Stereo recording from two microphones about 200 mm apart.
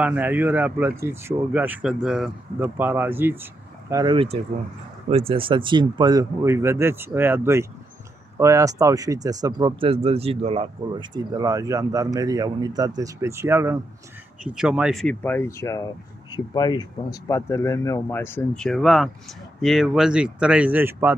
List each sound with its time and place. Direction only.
0.0 s speech: 5° right (ahead or behind)
3.9 s speech: 25° right (ahead or behind)